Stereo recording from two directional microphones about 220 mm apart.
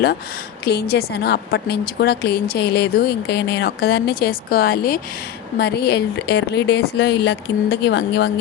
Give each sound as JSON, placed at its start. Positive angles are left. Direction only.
{"t": 0.6, "sound": "a woman's voice", "side_deg": 45}